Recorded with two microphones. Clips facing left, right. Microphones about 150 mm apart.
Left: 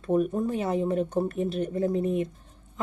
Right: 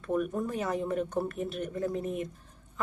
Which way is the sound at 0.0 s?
30° left (ahead or behind).